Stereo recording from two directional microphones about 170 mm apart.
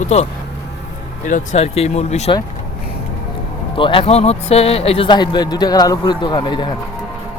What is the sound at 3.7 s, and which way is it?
Speech, 30° left (ahead or behind).